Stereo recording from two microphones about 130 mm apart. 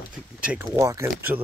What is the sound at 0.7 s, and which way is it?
Speech, 25° right (ahead or behind).